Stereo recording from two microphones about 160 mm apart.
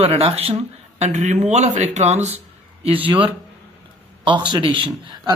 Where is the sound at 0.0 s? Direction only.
40° right (ahead or behind).